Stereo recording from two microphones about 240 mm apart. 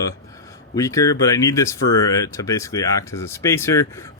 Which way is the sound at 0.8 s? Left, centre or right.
Centre.